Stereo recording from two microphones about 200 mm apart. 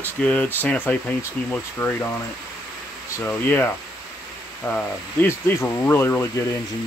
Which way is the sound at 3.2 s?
10° left (ahead or behind).